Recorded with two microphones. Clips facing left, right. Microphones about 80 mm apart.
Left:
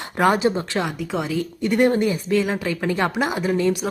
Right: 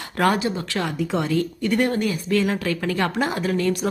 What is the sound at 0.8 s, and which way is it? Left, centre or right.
Speech, centre.